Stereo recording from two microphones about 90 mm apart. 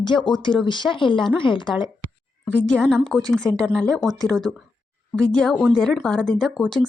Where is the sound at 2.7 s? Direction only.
10° left (ahead or behind).